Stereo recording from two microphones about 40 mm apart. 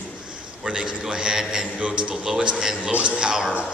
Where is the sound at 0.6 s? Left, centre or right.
Centre.